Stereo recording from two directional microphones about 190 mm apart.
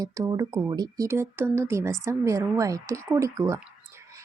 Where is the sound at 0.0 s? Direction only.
20° right (ahead or behind).